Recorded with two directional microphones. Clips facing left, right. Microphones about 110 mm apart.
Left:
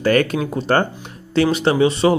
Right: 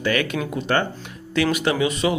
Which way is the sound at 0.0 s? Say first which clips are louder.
Left 6 dB; 40° left (ahead or behind).